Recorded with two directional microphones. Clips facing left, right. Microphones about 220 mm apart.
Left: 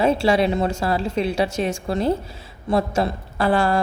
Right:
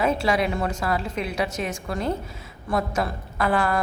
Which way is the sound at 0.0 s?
30° left (ahead or behind).